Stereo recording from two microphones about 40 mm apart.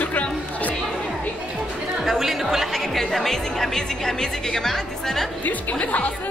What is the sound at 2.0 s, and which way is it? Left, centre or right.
Speech, centre.